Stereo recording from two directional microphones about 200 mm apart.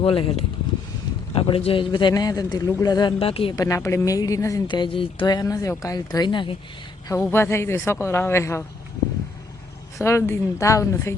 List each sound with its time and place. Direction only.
0.0 s a man's voice: 25° left (ahead or behind)
3.5 s a woman's voice: 15° left (ahead or behind)
7.1 s a woman's voice: 10° left (ahead or behind)
10.0 s a woman's voice: 15° left (ahead or behind)